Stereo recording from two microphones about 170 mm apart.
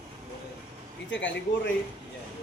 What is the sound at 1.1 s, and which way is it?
Speech, 90° left.